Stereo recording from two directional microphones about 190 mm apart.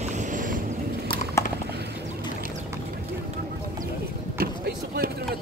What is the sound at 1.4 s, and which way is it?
Clip-clop, 15° left (ahead or behind).